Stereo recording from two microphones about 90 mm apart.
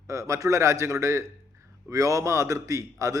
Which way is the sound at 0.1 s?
35° right (ahead or behind).